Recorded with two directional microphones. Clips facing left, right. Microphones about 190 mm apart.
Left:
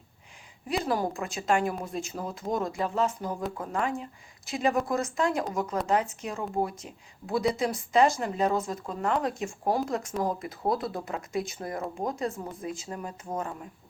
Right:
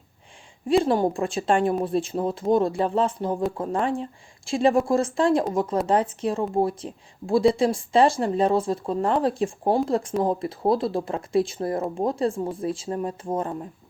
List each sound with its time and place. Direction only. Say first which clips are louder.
0.7 s speech: right 8 dB; 25° right (ahead or behind)